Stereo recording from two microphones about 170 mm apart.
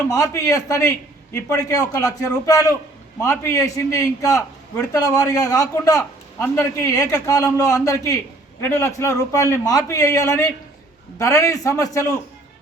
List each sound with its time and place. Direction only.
0.1 s a man's voice: 20° left (ahead or behind)